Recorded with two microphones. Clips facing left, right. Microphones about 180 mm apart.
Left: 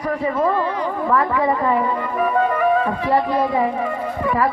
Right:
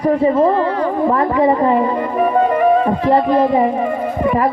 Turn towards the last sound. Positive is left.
turn(degrees=-25)  # may be behind; listen again after turning